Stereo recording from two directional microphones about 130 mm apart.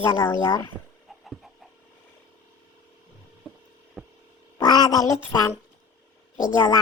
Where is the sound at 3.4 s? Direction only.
5° right (ahead or behind).